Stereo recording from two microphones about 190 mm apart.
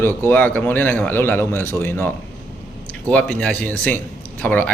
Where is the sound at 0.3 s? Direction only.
10° left (ahead or behind).